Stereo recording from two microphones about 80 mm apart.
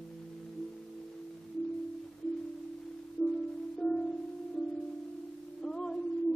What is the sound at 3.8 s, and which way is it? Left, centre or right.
Music, centre.